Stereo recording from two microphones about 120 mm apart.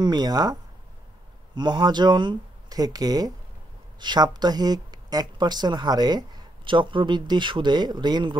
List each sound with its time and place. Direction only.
0.0 s speech: 35° right (ahead or behind)